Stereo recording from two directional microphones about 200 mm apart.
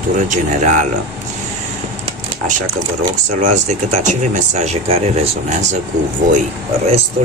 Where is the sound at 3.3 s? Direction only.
35° right (ahead or behind).